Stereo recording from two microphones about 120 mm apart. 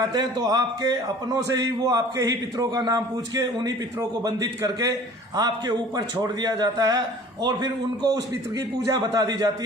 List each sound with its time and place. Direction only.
0.0 s a man's voice: 35° right (ahead or behind)
4.2 s a man's voice: 30° right (ahead or behind)